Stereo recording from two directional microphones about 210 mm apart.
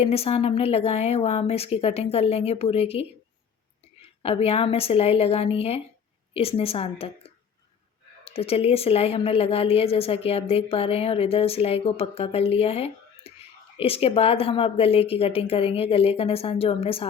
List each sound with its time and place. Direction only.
0.0 s a woman's voice: 30° left (ahead or behind)
4.2 s a woman's voice: 30° left (ahead or behind)